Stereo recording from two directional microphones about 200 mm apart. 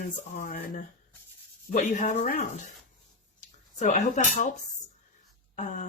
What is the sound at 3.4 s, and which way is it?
Speech, 35° left (ahead or behind).